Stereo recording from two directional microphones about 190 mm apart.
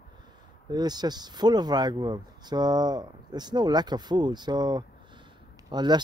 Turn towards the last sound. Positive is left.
turn(degrees=-20)  # may be behind; listen again after turning